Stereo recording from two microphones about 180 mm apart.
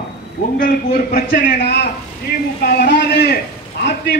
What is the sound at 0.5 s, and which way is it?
A man's voice, 50° left (ahead or behind).